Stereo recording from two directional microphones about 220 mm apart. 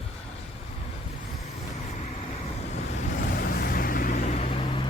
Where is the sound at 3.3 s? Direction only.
40° left (ahead or behind); by 4.9 s 25° left (ahead or behind).